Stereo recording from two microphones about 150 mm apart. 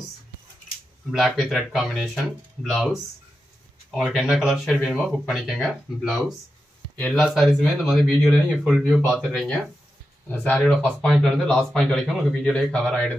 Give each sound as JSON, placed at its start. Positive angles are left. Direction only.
{"t": 1.1, "sound": "speech", "side_deg": 0}
{"t": 10.2, "sound": "speech", "side_deg": 10}